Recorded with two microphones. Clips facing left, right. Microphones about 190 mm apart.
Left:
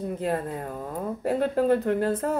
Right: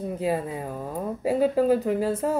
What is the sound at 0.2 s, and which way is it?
Speech, 5° right (ahead or behind).